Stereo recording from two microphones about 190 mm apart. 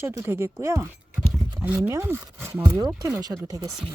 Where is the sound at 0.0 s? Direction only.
15° right (ahead or behind).